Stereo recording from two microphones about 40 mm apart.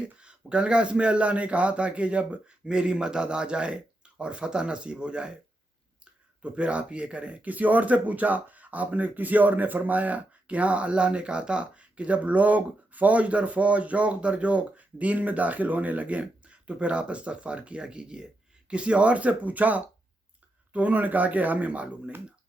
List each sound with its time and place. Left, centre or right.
0.0 s speech: right
2.6 s speech: right
6.4 s speech: right